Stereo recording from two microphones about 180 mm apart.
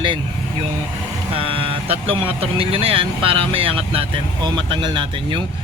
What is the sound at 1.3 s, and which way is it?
Speech, 30° right (ahead or behind).